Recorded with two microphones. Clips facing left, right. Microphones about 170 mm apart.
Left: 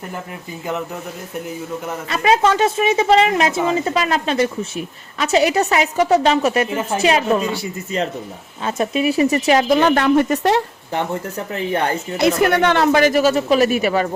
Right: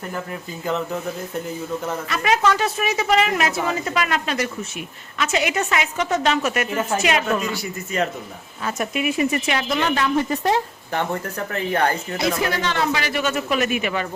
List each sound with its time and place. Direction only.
2.0 s a woman's voice: 30° left (ahead or behind)
9.9 s speech: 60° left (ahead or behind)
10.9 s a woman's voice: 20° left (ahead or behind)
12.2 s speech: 60° left (ahead or behind); by 14.1 s 40° left (ahead or behind)